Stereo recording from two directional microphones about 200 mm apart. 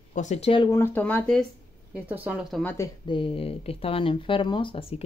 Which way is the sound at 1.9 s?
10° right (ahead or behind).